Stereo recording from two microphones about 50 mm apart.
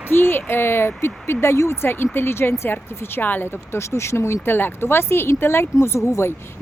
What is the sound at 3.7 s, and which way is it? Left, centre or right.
Speech, left.